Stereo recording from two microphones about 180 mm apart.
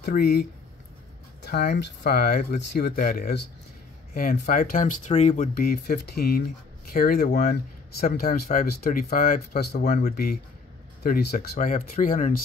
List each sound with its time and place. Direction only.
0.0 s speech: 60° left (ahead or behind); by 5.5 s 40° left (ahead or behind)
5.6 s speech: 60° left (ahead or behind)